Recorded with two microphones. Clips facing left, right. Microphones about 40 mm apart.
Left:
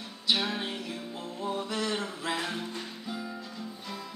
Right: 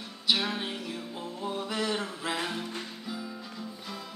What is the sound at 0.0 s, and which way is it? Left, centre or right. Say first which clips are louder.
Music: right 1 dB; centre.